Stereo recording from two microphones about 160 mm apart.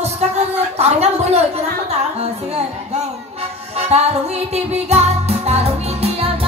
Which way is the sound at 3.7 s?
40° right (ahead or behind).